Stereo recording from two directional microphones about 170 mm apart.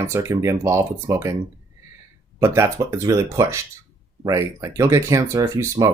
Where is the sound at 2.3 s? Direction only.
15° right (ahead or behind).